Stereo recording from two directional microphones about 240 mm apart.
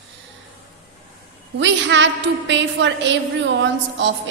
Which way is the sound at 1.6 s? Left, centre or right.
Right.